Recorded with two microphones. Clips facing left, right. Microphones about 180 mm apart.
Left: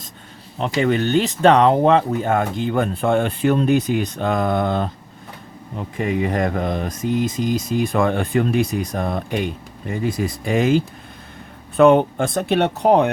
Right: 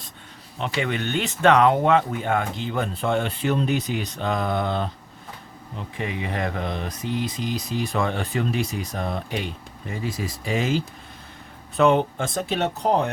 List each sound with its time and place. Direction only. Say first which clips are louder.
0.6 s speech: left 7 dB; 40° left (ahead or behind)
6.0 s speech: left 8 dB; 45° left (ahead or behind); by 13.1 s 65° left (ahead or behind)